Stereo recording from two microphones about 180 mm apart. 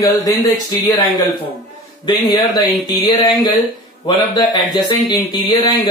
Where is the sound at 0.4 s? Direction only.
20° left (ahead or behind).